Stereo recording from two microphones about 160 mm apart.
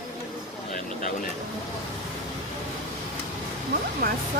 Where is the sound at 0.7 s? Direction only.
60° left (ahead or behind).